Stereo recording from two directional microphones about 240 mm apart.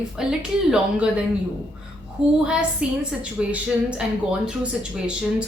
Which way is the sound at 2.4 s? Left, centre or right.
Centre.